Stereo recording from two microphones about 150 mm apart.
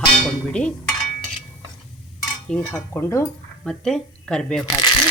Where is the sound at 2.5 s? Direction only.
10° left (ahead or behind).